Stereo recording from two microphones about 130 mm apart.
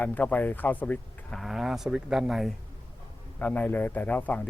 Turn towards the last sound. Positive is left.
turn(degrees=10)  # may be behind; listen again after turning